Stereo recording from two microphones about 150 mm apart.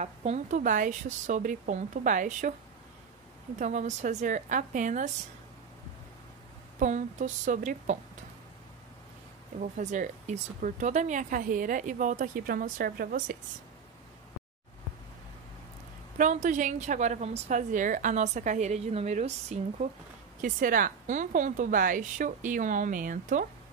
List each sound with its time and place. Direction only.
0.0 s speech: 50° right (ahead or behind)
3.5 s speech: 55° right (ahead or behind)
6.8 s speech: 55° right (ahead or behind)
9.6 s speech: 55° right (ahead or behind); by 13.4 s 75° right (ahead or behind)
16.2 s a woman's voice: 55° right (ahead or behind)
20.4 s speech: 65° right (ahead or behind)